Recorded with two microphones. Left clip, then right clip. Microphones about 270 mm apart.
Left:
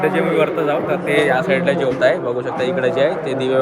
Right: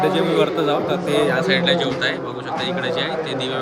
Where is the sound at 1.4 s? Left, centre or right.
Centre.